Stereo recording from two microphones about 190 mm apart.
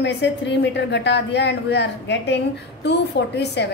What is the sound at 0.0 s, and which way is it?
A woman's voice, 65° left (ahead or behind).